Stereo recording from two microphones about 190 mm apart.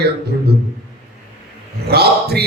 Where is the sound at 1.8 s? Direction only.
55° right (ahead or behind).